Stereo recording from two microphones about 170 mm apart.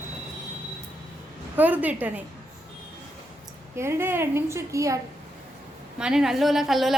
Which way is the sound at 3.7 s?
15° right (ahead or behind).